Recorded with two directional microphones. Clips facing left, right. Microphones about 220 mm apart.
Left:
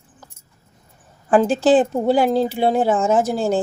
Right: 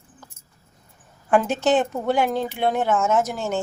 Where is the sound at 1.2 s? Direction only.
30° left (ahead or behind).